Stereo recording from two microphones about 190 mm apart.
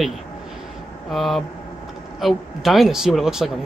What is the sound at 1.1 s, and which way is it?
Speech, centre (ahead or behind).